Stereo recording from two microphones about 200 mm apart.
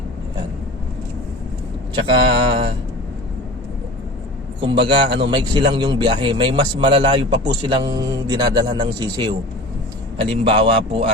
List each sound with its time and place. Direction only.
2.0 s a man's voice: 25° right (ahead or behind)
4.9 s a man's voice: 25° right (ahead or behind)